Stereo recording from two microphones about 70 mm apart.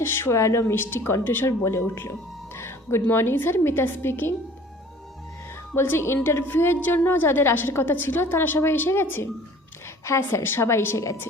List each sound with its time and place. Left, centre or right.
0.0 s a woman's voice: left
2.6 s music: left
3.1 s a woman's voice: left
5.7 s a woman's voice: left